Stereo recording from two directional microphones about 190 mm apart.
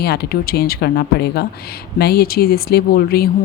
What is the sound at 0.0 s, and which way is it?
Speech, 55° left (ahead or behind).